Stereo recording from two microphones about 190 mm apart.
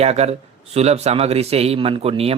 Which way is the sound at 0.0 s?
35° right (ahead or behind).